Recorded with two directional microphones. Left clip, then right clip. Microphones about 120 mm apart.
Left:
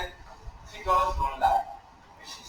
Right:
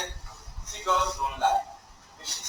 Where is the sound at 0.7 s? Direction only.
30° right (ahead or behind).